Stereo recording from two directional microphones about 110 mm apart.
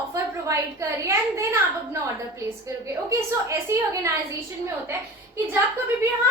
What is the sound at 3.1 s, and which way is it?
A woman's voice, 25° right (ahead or behind).